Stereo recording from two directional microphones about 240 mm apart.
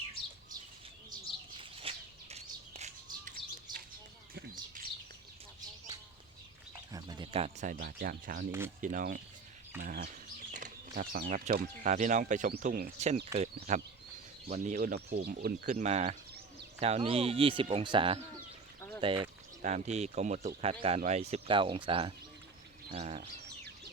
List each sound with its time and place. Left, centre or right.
1.5 s bird: right
6.9 s speech: centre